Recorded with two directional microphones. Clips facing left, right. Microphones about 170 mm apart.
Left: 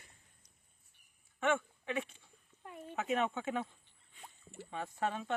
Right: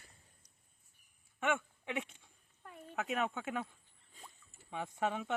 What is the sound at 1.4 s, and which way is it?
Speech, 15° right (ahead or behind).